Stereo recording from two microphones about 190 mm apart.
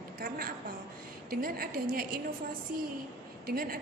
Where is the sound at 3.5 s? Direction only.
50° right (ahead or behind).